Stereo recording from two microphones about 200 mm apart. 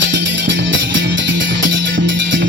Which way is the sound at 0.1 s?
65° right (ahead or behind).